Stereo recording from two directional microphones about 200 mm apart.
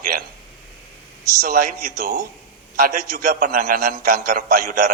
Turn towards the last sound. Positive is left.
turn(degrees=-45)  # may be behind; listen again after turning